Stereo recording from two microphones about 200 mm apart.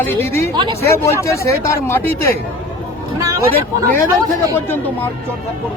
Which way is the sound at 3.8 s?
15° right (ahead or behind).